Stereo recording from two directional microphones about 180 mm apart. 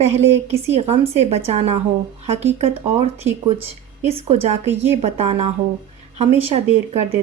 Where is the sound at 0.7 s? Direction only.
35° right (ahead or behind).